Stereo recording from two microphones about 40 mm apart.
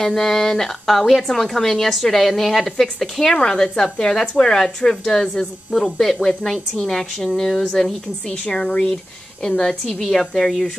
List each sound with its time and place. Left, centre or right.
0.0 s a woman's voice: centre